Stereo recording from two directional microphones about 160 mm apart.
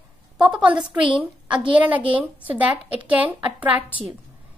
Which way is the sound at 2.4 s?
10° right (ahead or behind).